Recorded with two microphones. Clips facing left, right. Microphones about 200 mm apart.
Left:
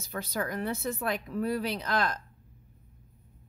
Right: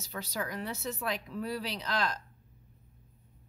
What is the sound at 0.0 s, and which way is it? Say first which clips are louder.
Speech: left 4 dB; 55° left (ahead or behind).